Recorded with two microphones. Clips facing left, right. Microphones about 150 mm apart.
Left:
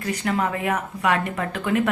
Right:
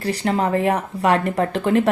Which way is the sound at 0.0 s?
30° right (ahead or behind).